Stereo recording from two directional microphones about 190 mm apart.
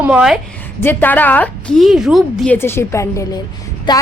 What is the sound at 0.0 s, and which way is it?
Speech, 5° right (ahead or behind).